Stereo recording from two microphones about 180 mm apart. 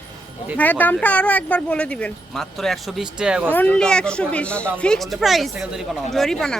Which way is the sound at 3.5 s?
10° left (ahead or behind).